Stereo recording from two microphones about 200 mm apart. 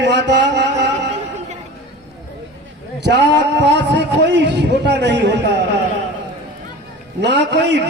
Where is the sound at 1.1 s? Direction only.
35° right (ahead or behind).